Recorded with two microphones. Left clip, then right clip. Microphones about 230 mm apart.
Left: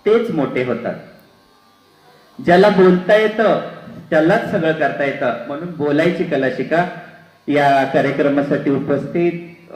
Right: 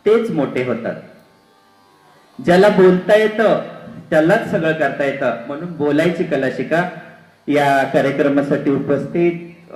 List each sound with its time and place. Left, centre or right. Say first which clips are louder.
0.0 s a man's voice: even; right
2.4 s a man's voice: even; right